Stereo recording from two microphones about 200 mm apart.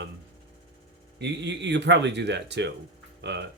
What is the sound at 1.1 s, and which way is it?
Speech, 60° right (ahead or behind).